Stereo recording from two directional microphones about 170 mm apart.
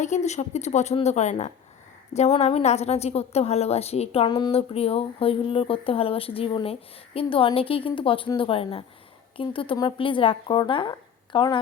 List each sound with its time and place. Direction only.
0.0 s a woman's voice: 45° left (ahead or behind); by 11.6 s 25° left (ahead or behind)